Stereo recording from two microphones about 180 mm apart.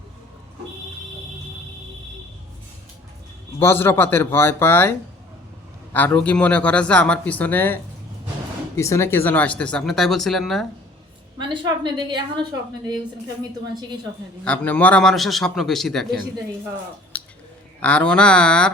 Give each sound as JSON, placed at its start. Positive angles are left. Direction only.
{"t": 3.6, "sound": "speech", "side_deg": 15}
{"t": 11.3, "sound": "a woman's voice", "side_deg": -25}
{"t": 14.4, "sound": "a man's voice", "side_deg": 10}
{"t": 17.7, "sound": "a man's voice", "side_deg": 5}